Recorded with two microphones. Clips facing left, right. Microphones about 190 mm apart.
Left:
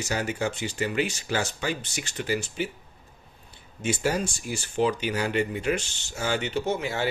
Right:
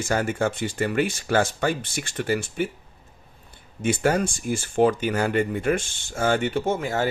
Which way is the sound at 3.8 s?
55° right (ahead or behind).